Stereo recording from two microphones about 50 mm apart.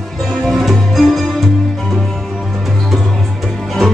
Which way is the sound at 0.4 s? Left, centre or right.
Centre.